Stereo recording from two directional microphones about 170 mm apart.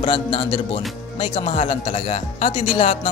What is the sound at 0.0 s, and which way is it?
Speech, 35° left (ahead or behind).